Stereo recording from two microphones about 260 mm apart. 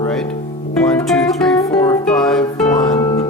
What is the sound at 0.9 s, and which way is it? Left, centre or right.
Music, centre.